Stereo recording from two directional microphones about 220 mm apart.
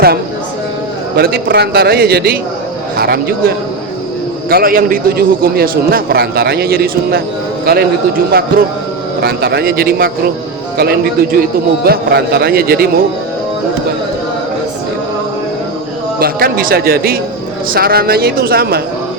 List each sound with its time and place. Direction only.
1.1 s a man's voice: 45° right (ahead or behind)
16.2 s a man's voice: 40° right (ahead or behind)